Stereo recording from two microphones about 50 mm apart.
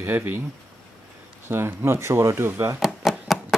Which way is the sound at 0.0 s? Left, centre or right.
Right.